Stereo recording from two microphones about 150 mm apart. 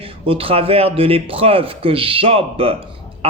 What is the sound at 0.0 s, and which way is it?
A man's voice, 40° right (ahead or behind).